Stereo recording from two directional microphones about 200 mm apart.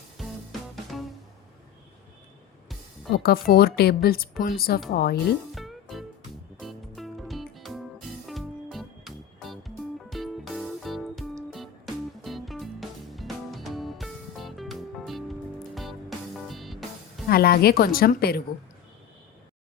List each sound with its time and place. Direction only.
0.9 s music: centre (ahead or behind)
3.2 s a woman's voice: 50° left (ahead or behind)
5.5 s music: centre (ahead or behind)
17.2 s a woman's voice: 50° left (ahead or behind)